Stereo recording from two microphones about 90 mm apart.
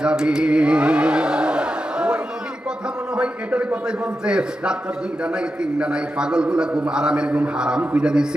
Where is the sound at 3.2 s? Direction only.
10° right (ahead or behind).